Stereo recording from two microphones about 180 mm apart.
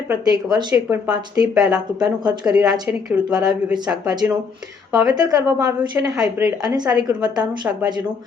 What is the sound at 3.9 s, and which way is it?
Speech, 15° right (ahead or behind).